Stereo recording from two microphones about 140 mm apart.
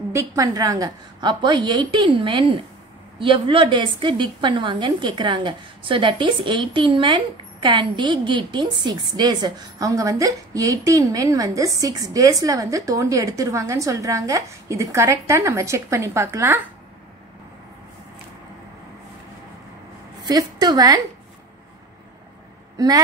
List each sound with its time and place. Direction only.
0.1 s a woman's voice: 25° right (ahead or behind)
20.2 s a woman's voice: 30° right (ahead or behind)
22.8 s a woman's voice: 25° right (ahead or behind)